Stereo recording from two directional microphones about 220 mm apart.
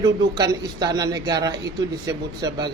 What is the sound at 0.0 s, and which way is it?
A man's voice, 15° right (ahead or behind).